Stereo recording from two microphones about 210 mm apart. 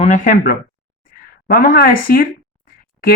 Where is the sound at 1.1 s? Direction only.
45° left (ahead or behind).